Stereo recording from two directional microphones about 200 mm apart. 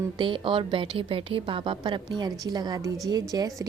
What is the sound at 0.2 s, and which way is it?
Speech, 25° right (ahead or behind).